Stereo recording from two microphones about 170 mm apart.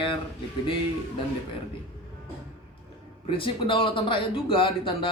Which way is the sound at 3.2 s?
30° left (ahead or behind).